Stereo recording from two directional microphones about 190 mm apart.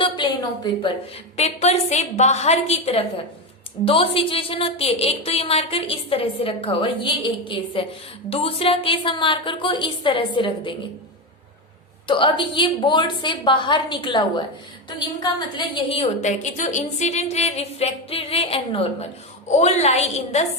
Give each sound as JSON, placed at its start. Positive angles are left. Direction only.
{"t": 0.0, "sound": "a sound", "side_deg": 25}
{"t": 1.4, "sound": "a woman's voice", "side_deg": 35}
{"t": 12.0, "sound": "a woman's voice", "side_deg": 25}